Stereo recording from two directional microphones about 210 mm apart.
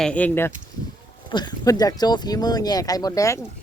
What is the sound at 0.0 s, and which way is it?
Speech, 5° left (ahead or behind).